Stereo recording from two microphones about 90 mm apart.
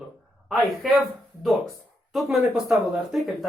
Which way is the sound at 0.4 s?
Centre (ahead or behind).